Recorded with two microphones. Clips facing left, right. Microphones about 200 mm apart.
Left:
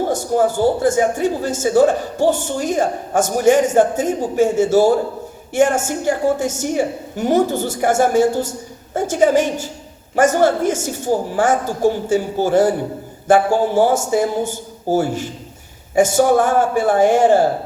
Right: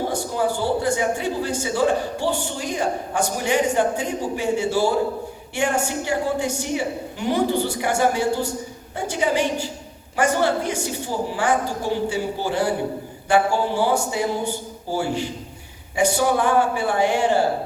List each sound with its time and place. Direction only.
0.1 s speech: 45° left (ahead or behind)